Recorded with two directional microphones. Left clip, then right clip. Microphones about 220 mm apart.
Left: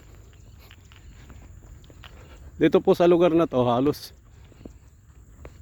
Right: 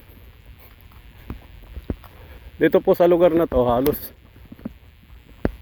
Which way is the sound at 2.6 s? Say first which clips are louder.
Right 3 dB; 10° left (ahead or behind).